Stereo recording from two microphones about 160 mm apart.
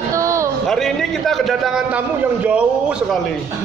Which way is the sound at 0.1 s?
20° right (ahead or behind).